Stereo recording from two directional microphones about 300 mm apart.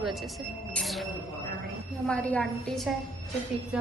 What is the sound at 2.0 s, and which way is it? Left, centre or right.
Speech, centre.